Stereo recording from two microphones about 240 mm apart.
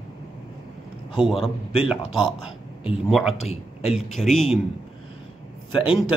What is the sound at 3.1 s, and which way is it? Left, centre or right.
Speech, centre.